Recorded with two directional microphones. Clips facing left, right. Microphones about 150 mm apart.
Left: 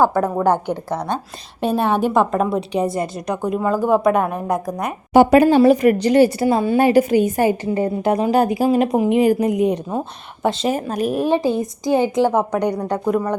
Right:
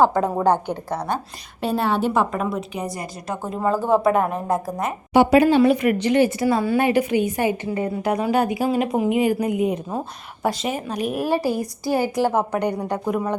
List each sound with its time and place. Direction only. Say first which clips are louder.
0.0 s a woman's voice: left 1 dB; 15° right (ahead or behind)
1.6 s a woman's voice: left 3 dB; 20° left (ahead or behind)
2.5 s a woman's voice: left 7 dB; 30° left (ahead or behind)
4.2 s a woman's voice: left 1 dB; 20° right (ahead or behind)
4.4 s speech: left 1 dB; 15° left (ahead or behind)
5.1 s speech: left 3 dB; 45° left (ahead or behind); by 6.7 s 25° left (ahead or behind)
6.7 s speech: left 5 dB; 35° left (ahead or behind)
7.7 s speech: left 4 dB; 30° left (ahead or behind); by 11.1 s 45° left (ahead or behind)
11.3 s a woman's voice: left 4 dB; 20° left (ahead or behind)
12.5 s a woman's voice: left 3 dB; 10° right (ahead or behind)